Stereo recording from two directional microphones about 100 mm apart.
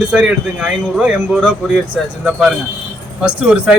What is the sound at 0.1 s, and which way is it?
A man's voice, 5° right (ahead or behind).